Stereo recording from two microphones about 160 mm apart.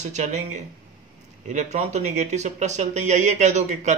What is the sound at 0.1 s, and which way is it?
Speech, 45° right (ahead or behind).